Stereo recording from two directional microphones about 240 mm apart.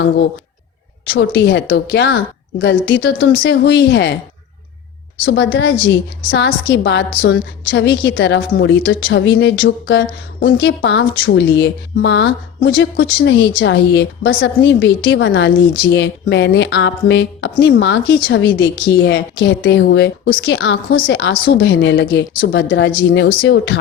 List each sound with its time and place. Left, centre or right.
1.1 s speech: left
5.2 s speech: left